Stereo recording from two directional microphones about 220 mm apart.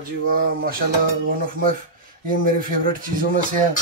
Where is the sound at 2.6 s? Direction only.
40° right (ahead or behind).